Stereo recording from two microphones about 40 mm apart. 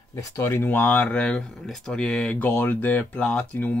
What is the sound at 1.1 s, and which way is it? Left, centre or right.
Speech, left.